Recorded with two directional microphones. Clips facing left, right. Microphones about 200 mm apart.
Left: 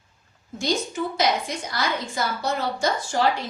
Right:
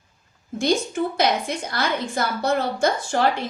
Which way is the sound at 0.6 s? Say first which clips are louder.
Right 4 dB; 55° right (ahead or behind).